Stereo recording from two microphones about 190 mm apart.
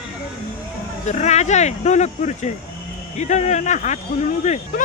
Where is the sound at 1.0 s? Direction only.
35° left (ahead or behind).